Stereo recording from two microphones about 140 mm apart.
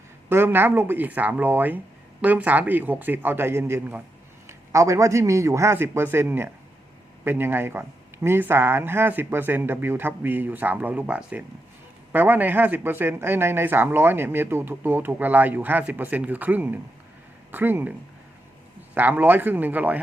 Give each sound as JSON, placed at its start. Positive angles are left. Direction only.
{"t": 0.3, "sound": "a man's voice", "side_deg": -15}
{"t": 18.9, "sound": "speech", "side_deg": -15}